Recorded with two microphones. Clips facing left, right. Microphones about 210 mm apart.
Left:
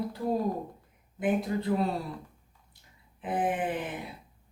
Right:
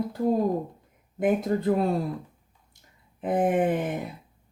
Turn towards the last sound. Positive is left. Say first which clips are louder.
# right 7 dB
turn(degrees=-45)  # may be behind; listen again after turning